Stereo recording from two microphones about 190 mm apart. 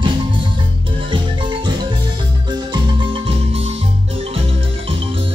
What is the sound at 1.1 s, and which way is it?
Marimba, 25° right (ahead or behind).